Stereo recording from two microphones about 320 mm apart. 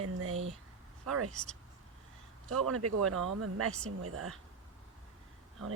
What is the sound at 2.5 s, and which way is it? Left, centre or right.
Speech, right.